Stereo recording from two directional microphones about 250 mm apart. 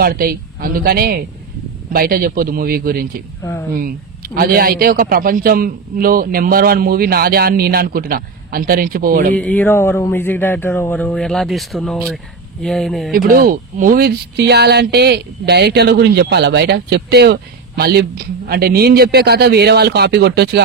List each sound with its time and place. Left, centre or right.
0.0 s speech: right
9.3 s speech: centre
13.1 s speech: right